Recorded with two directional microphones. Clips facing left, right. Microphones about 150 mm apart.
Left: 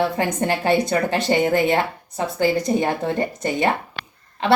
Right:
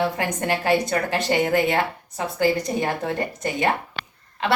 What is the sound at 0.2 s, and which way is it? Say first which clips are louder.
Speech: left 3 dB; 25° left (ahead or behind).